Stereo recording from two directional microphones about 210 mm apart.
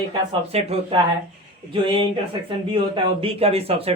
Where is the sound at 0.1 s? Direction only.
30° right (ahead or behind).